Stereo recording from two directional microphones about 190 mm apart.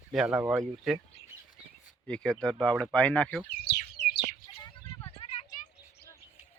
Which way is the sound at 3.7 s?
60° left (ahead or behind).